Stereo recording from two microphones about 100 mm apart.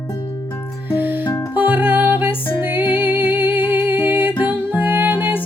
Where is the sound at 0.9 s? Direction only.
20° right (ahead or behind).